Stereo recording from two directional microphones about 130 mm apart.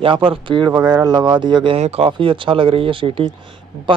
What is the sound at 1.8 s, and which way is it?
A man's voice, 50° right (ahead or behind).